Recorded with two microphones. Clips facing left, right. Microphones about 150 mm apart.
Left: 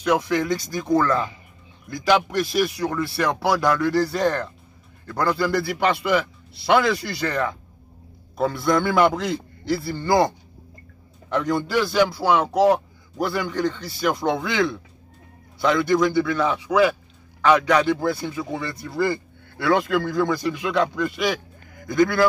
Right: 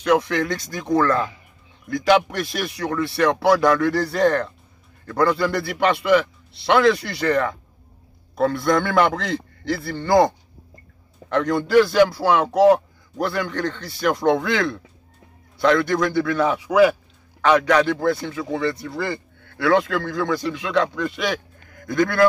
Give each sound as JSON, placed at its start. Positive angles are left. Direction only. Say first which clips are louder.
{"t": 0.0, "sound": "a man's voice", "louder": "right 2 dB", "side_deg": 5}